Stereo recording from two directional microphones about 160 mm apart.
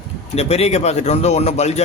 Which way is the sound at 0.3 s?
40° left (ahead or behind).